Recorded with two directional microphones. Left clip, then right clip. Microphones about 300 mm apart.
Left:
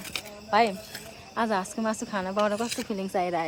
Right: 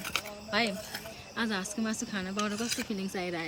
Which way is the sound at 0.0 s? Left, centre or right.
Centre.